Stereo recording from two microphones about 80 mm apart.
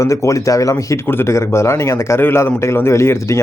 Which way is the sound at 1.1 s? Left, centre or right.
Left.